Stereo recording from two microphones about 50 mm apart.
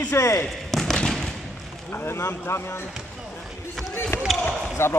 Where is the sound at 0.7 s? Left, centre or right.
Centre.